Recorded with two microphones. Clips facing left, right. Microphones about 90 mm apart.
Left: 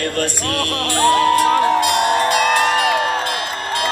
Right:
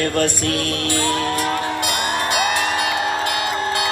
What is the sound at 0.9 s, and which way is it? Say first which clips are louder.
Music: left 9 dB; 55° left (ahead or behind).